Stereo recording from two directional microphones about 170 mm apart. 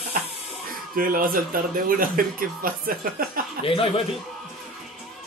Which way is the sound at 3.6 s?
35° left (ahead or behind).